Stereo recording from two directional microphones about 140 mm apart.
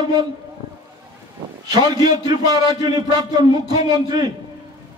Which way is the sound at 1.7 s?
30° right (ahead or behind).